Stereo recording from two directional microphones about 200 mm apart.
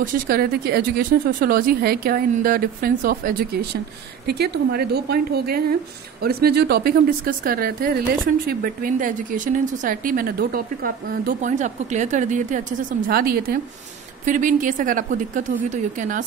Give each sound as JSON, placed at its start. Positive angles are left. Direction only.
{"t": 0.0, "sound": "speech", "side_deg": -50}